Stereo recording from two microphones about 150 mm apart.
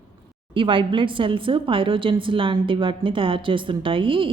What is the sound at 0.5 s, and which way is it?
A woman's voice, 35° right (ahead or behind).